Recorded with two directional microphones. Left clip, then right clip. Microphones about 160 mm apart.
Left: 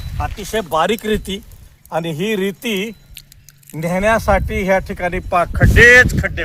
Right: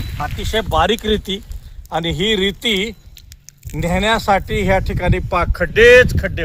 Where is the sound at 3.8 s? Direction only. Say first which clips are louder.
Left 1 dB; 45° right (ahead or behind); by 6.0 s 90° right.